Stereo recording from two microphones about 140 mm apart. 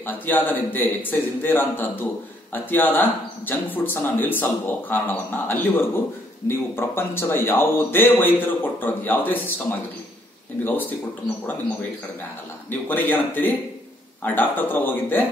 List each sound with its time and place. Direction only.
0.0 s speech: 15° left (ahead or behind)
12.8 s speech: 15° left (ahead or behind)